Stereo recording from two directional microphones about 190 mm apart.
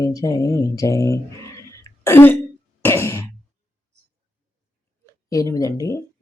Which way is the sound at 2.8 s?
15° left (ahead or behind).